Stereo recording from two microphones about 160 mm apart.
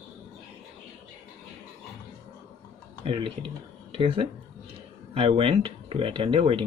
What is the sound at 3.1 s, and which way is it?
Speech, 35° right (ahead or behind).